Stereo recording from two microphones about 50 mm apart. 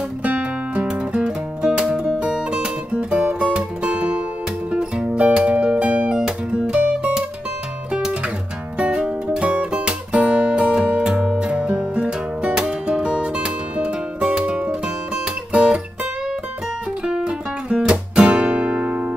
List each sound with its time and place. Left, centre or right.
0.2 s music: right
17.0 s guitar: centre; by 19.1 s right